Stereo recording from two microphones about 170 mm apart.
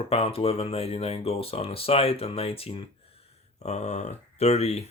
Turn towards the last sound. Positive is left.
turn(degrees=40)  # may be behind; listen again after turning